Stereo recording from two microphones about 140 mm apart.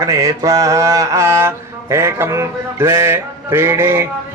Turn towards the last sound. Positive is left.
turn(degrees=-20)  # may be behind; listen again after turning